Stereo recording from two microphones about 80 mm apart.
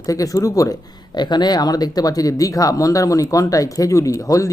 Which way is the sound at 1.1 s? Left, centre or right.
Left.